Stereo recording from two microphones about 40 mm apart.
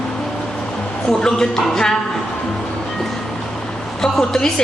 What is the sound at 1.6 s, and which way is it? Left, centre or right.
Speech, centre.